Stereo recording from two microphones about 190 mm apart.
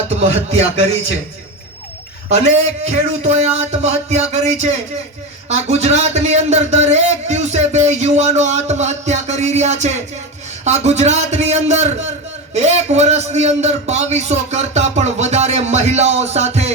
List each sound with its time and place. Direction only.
0.1 s a man's voice: 35° right (ahead or behind)
2.3 s a man's voice: 35° right (ahead or behind)